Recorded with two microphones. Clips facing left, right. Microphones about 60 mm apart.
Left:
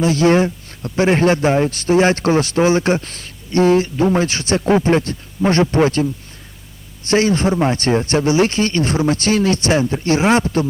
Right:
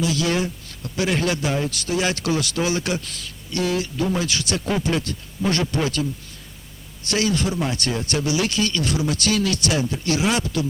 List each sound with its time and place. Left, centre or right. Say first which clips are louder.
0.0 s speech: left 8 dB; left